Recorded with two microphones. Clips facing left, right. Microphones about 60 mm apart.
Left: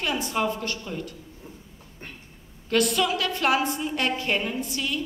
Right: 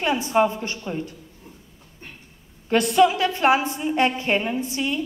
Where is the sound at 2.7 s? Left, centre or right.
Right.